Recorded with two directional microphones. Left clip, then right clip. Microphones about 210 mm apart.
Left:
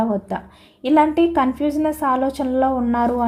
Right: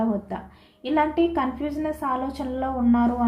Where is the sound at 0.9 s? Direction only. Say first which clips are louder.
Left 6 dB; 50° left (ahead or behind).